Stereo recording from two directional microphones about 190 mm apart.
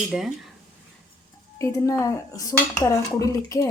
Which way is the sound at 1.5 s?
15° left (ahead or behind).